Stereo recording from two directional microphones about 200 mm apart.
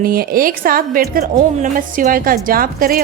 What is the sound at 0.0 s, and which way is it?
A woman's voice, 50° right (ahead or behind).